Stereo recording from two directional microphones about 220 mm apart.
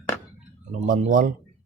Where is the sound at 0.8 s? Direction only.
35° right (ahead or behind).